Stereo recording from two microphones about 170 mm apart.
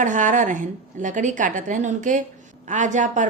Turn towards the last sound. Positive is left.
turn(degrees=-45)  # may be behind; listen again after turning